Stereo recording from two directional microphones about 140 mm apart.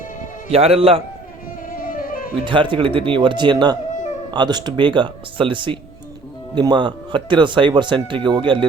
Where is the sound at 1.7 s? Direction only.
85° left.